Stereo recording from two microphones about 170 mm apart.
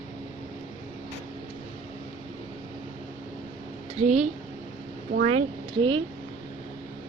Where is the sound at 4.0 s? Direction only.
40° right (ahead or behind).